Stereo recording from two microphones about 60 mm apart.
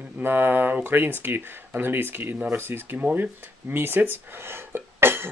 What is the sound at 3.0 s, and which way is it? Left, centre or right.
Speech, right.